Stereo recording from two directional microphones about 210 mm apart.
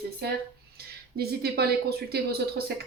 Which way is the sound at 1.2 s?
50° right (ahead or behind).